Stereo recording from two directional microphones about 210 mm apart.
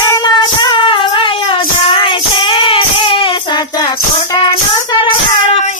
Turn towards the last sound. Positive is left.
turn(degrees=25)  # may be behind; listen again after turning